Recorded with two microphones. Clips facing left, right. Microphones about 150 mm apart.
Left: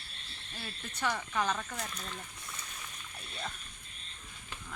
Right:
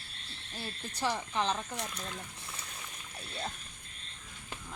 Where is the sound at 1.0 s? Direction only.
30° right (ahead or behind).